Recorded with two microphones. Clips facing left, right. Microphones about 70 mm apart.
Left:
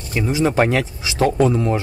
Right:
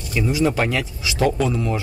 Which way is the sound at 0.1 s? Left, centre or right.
Left.